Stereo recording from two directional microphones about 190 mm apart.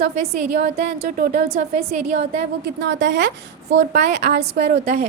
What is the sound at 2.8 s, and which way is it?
A woman's voice, 65° right (ahead or behind).